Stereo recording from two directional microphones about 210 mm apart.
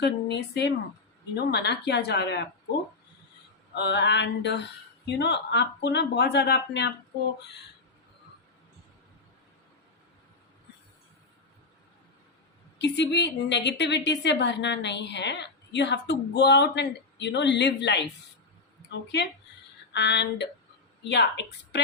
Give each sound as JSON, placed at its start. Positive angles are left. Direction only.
{"t": 0.0, "sound": "speech", "side_deg": 55}
{"t": 3.8, "sound": "a woman's voice", "side_deg": 55}
{"t": 12.8, "sound": "a woman's voice", "side_deg": 55}
{"t": 19.9, "sound": "a woman's voice", "side_deg": 55}